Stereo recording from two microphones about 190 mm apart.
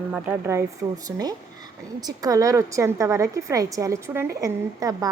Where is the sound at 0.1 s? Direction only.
10° right (ahead or behind).